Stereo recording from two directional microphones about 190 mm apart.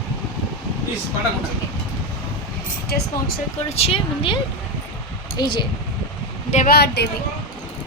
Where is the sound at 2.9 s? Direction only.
55° left (ahead or behind).